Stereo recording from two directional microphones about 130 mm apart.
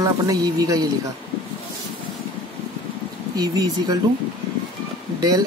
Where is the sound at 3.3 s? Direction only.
30° right (ahead or behind).